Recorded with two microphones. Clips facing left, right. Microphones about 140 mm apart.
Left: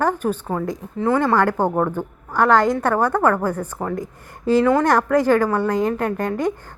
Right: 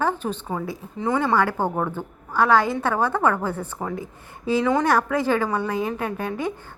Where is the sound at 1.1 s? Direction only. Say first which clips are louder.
Left 3 dB; 15° right (ahead or behind).